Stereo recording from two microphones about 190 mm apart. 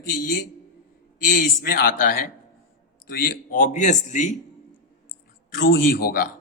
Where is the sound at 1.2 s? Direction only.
50° left (ahead or behind).